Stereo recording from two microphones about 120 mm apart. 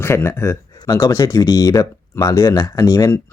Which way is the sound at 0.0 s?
20° left (ahead or behind).